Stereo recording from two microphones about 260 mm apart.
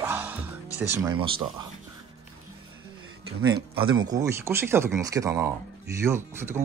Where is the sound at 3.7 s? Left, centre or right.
Centre.